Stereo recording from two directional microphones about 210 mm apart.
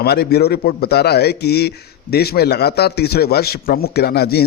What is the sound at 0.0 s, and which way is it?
Speech, 50° left (ahead or behind).